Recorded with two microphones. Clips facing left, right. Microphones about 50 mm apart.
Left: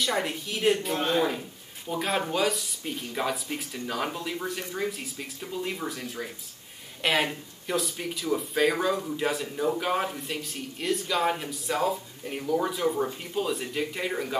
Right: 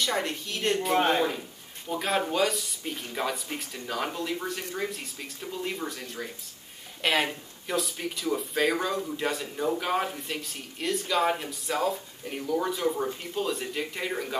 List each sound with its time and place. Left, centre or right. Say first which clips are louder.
0.0 s speech: left 1 dB; centre
1.9 s speech: even; centre